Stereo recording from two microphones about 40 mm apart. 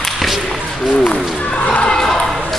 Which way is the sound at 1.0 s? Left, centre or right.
Left.